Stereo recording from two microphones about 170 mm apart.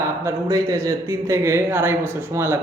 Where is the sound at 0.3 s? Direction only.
15° right (ahead or behind).